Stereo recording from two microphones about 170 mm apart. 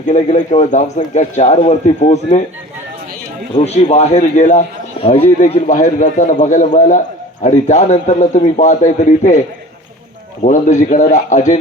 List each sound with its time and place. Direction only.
0.1 s a man's voice: 40° left (ahead or behind)
3.5 s a man's voice: 40° left (ahead or behind)
10.4 s a man's voice: 45° left (ahead or behind)